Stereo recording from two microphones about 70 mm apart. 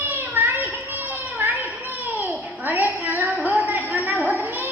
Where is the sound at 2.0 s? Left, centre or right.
Right.